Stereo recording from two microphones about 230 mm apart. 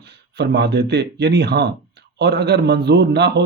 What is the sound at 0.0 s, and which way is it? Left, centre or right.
Speech, right.